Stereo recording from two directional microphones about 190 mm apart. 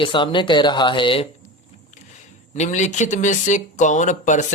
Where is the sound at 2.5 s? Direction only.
40° left (ahead or behind).